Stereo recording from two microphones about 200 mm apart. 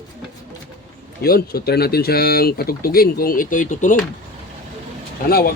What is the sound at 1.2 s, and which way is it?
Speech, 50° left (ahead or behind).